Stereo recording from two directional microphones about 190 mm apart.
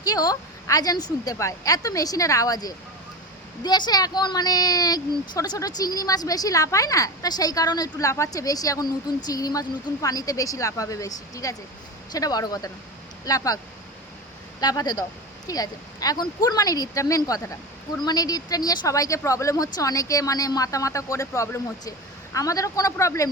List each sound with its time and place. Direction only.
0.0 s a woman's voice: 20° left (ahead or behind)
14.6 s a woman's voice: 20° left (ahead or behind)